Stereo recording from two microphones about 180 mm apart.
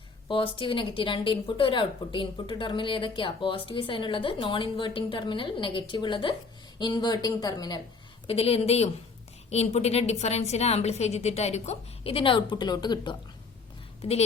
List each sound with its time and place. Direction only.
0.3 s a woman's voice: 30° left (ahead or behind)
8.3 s a woman's voice: 35° left (ahead or behind)